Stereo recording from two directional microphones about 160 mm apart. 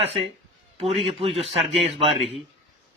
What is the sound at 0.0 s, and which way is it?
Speech, 40° right (ahead or behind).